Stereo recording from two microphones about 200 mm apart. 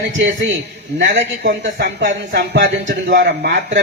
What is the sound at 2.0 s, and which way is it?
A man's voice, 40° right (ahead or behind).